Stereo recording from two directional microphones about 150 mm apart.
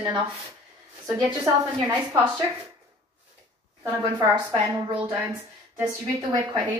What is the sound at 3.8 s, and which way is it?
A woman's voice, 30° right (ahead or behind).